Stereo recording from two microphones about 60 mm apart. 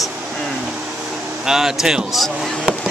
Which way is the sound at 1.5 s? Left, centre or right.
Centre.